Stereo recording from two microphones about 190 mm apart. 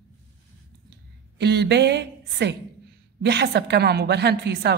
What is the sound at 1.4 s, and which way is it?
A woman's voice, 60° right (ahead or behind).